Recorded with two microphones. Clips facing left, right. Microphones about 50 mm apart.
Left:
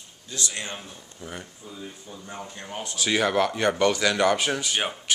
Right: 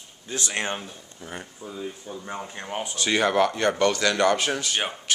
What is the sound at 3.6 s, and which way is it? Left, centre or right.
Speech, centre.